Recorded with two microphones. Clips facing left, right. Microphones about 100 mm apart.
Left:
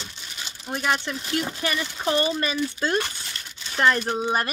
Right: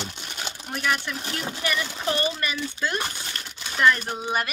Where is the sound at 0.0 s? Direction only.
60° right (ahead or behind).